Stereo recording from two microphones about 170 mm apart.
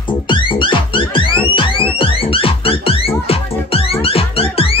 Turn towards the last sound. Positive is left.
turn(degrees=35)  # may be behind; listen again after turning